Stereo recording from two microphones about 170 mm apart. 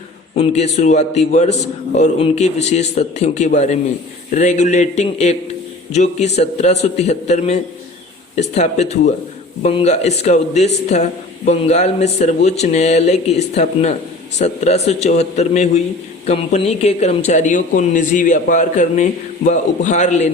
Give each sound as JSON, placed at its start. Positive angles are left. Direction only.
{"t": 0.3, "sound": "a man's voice", "side_deg": 40}